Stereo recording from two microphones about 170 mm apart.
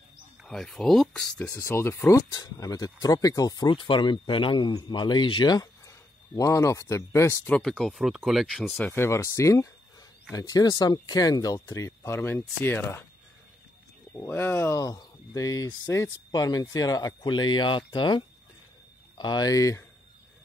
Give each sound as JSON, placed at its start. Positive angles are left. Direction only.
{"t": 0.4, "sound": "speech", "side_deg": 0}
{"t": 14.1, "sound": "speech", "side_deg": 15}